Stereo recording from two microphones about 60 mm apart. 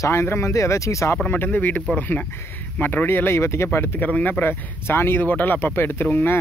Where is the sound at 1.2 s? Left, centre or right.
Left.